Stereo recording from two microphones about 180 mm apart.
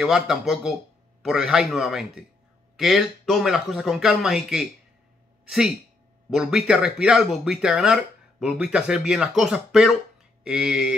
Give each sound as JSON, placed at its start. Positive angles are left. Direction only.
{"t": 0.0, "sound": "speech", "side_deg": -5}
{"t": 6.3, "sound": "speech", "side_deg": -5}